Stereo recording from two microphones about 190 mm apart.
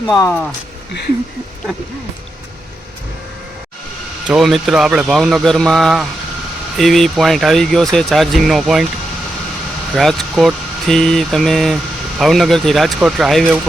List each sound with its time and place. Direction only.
0.1 s speech: 15° left (ahead or behind)
4.3 s speech: centre (ahead or behind)
9.9 s speech: centre (ahead or behind)